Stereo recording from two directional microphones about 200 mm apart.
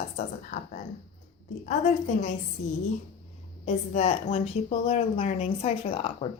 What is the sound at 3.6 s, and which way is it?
A woman's voice, 35° left (ahead or behind).